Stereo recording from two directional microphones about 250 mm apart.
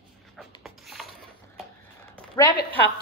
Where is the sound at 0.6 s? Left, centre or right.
Centre.